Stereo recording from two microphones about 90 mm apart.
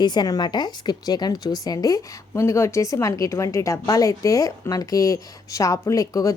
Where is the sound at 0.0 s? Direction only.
55° left (ahead or behind).